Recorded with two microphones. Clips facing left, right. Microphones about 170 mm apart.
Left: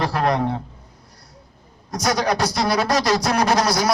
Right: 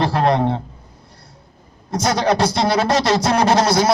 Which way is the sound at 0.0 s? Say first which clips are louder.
Right 4 dB; 30° right (ahead or behind).